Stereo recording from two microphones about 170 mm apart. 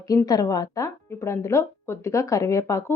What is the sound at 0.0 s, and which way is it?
Speech, 20° left (ahead or behind).